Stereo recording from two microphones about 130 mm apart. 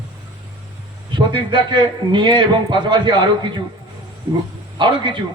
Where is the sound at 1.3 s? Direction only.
35° right (ahead or behind).